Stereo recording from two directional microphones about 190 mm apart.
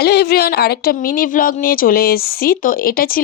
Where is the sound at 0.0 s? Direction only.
60° left (ahead or behind).